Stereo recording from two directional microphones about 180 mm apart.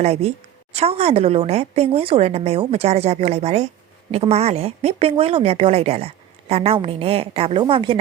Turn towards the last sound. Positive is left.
turn(degrees=-25)  # may be behind; listen again after turning